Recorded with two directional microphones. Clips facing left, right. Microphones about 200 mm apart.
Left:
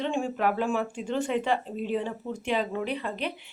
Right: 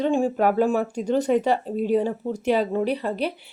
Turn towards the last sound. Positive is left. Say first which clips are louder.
# right 7 dB
turn(degrees=-40)  # may be behind; listen again after turning